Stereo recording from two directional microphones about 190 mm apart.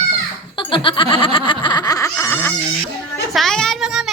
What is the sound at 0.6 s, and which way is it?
Snicker, 25° left (ahead or behind).